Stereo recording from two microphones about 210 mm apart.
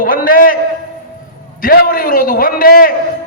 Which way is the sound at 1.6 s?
45° left (ahead or behind).